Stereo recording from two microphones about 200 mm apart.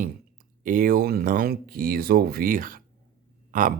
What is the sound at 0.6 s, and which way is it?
Speech, 45° right (ahead or behind).